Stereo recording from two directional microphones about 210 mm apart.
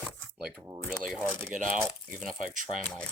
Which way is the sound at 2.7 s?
5° left (ahead or behind).